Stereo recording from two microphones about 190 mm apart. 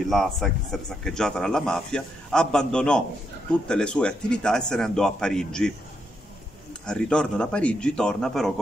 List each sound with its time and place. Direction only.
0.0 s speech: centre (ahead or behind)
6.9 s speech: 5° left (ahead or behind)